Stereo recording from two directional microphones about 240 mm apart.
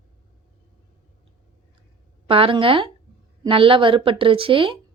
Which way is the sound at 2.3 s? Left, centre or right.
Right.